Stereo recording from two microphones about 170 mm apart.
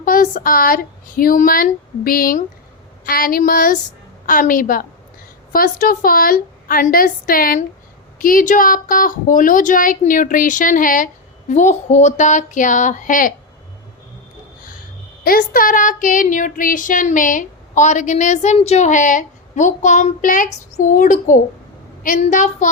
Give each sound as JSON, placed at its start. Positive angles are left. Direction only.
{"t": 0.0, "sound": "speech", "side_deg": 55}
{"t": 4.3, "sound": "child singing", "side_deg": 55}
{"t": 5.5, "sound": "speech", "side_deg": 55}
{"t": 8.2, "sound": "child singing", "side_deg": 55}
{"t": 15.2, "sound": "child singing", "side_deg": 60}